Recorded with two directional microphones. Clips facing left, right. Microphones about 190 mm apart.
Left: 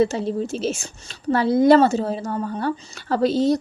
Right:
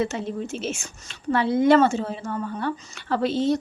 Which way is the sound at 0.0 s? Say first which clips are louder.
Left 6 dB; 35° left (ahead or behind).